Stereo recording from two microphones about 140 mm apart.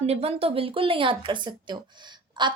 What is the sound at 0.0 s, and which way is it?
A woman's voice, 45° right (ahead or behind).